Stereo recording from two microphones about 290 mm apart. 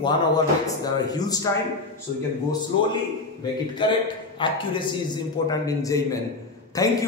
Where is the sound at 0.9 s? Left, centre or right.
Centre.